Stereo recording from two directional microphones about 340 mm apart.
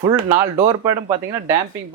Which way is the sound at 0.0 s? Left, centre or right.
Centre.